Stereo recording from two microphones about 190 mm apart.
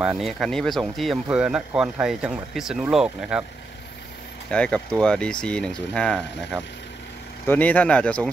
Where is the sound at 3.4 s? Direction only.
65° left (ahead or behind).